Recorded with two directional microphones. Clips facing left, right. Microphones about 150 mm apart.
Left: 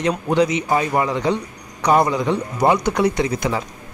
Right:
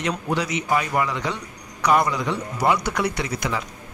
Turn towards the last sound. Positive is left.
turn(degrees=25)  # may be behind; listen again after turning